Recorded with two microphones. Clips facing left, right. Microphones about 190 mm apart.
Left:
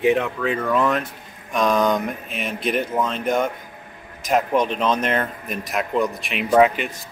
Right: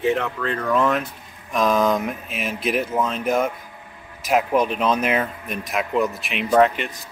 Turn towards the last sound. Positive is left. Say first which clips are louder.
# left 1 dB
turn(degrees=5)  # may be behind; listen again after turning